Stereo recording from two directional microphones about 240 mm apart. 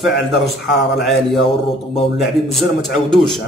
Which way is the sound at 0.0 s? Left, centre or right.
Centre.